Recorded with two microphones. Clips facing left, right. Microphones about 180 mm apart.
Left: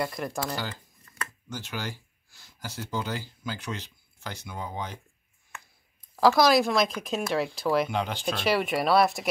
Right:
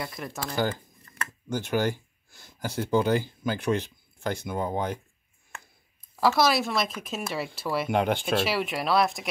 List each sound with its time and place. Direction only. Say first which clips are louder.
0.0 s speech: left 4 dB; centre (ahead or behind)
0.6 s speech: right 9 dB; 50° right (ahead or behind)
6.1 s speech: left 3 dB; centre (ahead or behind)
7.9 s speech: right 5 dB; 55° right (ahead or behind)
8.5 s speech: left 3 dB; centre (ahead or behind)